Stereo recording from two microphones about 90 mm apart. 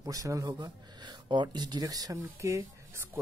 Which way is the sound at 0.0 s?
40° right (ahead or behind).